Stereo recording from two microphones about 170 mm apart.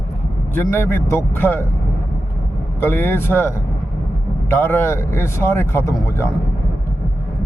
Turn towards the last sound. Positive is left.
turn(degrees=15)  # may be behind; listen again after turning